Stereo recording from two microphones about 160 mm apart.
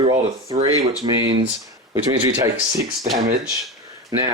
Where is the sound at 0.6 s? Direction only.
20° right (ahead or behind).